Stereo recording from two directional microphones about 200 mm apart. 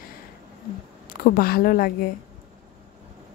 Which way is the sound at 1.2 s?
45° left (ahead or behind).